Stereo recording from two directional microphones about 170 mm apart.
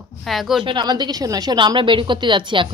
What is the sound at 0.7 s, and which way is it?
A woman's voice, 25° right (ahead or behind).